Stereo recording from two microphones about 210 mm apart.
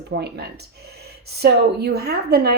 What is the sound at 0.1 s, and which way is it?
Speech, 50° right (ahead or behind).